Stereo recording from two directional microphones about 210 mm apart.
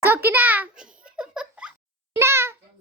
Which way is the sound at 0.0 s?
10° right (ahead or behind).